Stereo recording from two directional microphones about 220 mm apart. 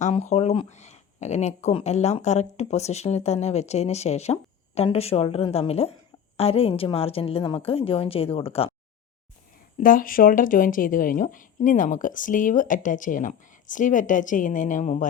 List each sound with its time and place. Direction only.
0.0 s speech: 30° left (ahead or behind)
9.8 s a woman's voice: 40° left (ahead or behind)